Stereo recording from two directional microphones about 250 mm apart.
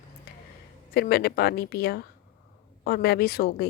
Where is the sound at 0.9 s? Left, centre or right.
Left.